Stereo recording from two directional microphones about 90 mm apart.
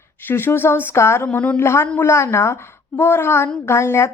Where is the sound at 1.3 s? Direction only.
15° left (ahead or behind).